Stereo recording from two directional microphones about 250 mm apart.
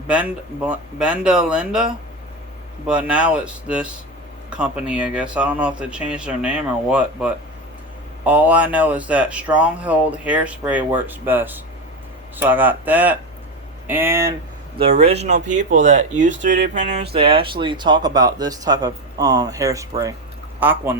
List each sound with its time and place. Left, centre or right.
0.1 s speech: centre
14.8 s speech: right; by 21.0 s centre